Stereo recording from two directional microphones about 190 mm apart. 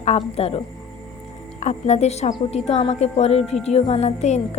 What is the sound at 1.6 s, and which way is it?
A woman's voice, 35° left (ahead or behind).